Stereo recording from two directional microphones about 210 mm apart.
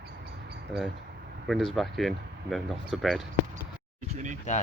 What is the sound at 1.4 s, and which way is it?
Speech, centre (ahead or behind).